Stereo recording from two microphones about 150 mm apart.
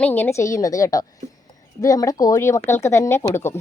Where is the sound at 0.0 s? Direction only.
15° left (ahead or behind).